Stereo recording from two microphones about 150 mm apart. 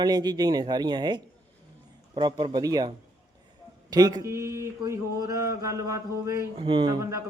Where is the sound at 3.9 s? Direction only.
25° right (ahead or behind).